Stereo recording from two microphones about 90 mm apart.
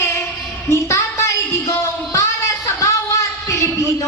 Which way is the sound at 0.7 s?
35° left (ahead or behind).